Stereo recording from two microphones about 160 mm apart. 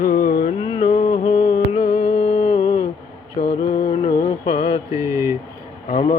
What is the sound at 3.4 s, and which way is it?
Mantra, 65° left (ahead or behind).